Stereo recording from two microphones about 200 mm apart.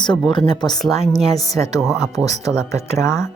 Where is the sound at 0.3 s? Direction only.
20° left (ahead or behind).